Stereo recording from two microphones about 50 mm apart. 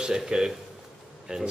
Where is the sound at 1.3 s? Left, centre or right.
Right.